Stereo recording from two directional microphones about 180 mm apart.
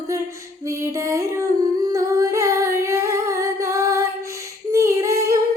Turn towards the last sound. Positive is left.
turn(degrees=-15)  # may be behind; listen again after turning